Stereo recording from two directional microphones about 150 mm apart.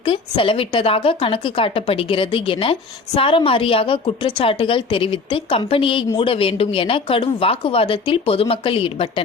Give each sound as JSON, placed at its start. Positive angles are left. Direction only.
{"t": 0.0, "sound": "speech", "side_deg": 35}